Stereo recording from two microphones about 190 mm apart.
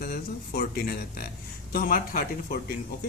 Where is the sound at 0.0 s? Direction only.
55° left (ahead or behind).